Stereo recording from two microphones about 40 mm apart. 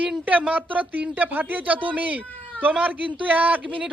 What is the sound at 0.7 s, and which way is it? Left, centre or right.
A man's voice, right.